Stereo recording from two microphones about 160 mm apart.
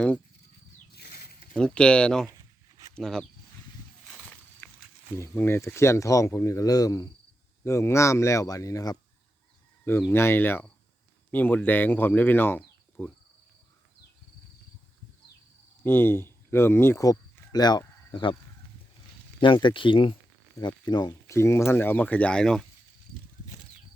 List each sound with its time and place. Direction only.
0.9 s a sound: 80° left
1.5 s speech: 5° left (ahead or behind)
2.4 s a sound: 25° right (ahead or behind)
2.9 s speech: 5° left (ahead or behind)
4.1 s walk: 10° left (ahead or behind)
5.1 s speech: 15° left (ahead or behind)
15.8 s speech: 15° left (ahead or behind); by 18.3 s 30° left (ahead or behind)
19.4 s speech: 30° left (ahead or behind); by 22.6 s 5° left (ahead or behind)